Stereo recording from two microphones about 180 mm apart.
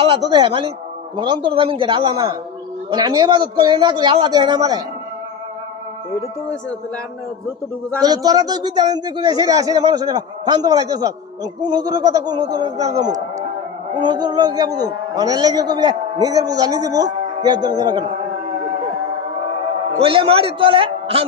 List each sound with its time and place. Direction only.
0.0 s a man's voice: 30° right (ahead or behind)
8.0 s a man's voice: 20° right (ahead or behind)
20.0 s a man's voice: 30° right (ahead or behind)